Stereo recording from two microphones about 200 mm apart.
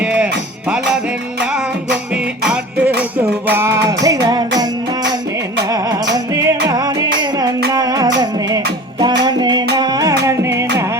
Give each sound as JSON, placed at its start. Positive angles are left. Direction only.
{"t": 0.0, "sound": "music", "side_deg": -5}
{"t": 2.4, "sound": "music", "side_deg": -5}
{"t": 5.7, "sound": "music", "side_deg": -20}